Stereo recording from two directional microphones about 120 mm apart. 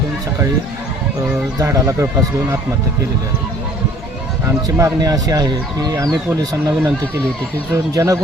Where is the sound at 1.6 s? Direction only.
25° right (ahead or behind).